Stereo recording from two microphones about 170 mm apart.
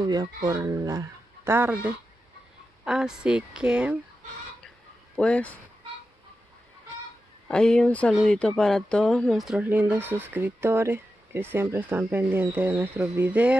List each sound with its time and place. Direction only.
0.0 s a woman's voice: 25° right (ahead or behind); by 4.0 s 5° right (ahead or behind)
5.1 s speech: 5° left (ahead or behind)
7.4 s speech: 5° left (ahead or behind)